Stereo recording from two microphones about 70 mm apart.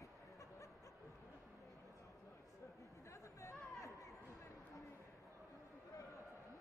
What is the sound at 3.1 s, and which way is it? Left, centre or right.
Chatter, left.